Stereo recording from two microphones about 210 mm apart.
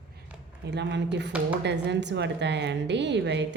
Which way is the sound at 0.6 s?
55° right (ahead or behind).